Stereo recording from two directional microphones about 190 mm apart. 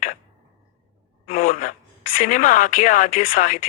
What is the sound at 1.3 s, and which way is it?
Speech, 45° left (ahead or behind).